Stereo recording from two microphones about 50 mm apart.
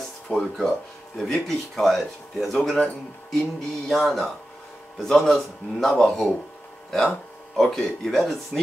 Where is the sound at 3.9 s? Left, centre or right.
Centre.